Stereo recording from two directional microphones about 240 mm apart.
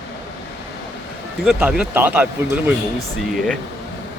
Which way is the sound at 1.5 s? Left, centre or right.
Centre.